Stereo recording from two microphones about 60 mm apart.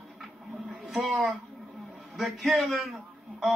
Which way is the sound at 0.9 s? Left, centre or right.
Centre.